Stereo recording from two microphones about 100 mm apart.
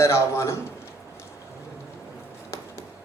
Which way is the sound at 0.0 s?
25° left (ahead or behind).